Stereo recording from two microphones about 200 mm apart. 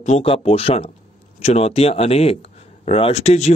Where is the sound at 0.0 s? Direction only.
30° left (ahead or behind).